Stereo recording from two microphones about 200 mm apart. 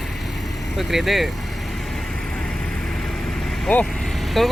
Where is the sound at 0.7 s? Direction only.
Centre (ahead or behind).